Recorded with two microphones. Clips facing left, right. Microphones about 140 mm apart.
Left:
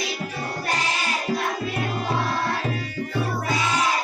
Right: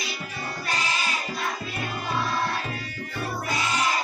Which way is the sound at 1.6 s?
80° left.